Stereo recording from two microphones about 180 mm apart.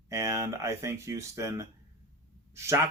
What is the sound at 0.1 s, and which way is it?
Speech, 15° right (ahead or behind).